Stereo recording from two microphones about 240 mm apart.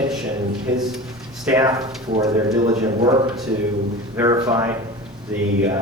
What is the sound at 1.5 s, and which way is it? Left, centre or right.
Speech, centre.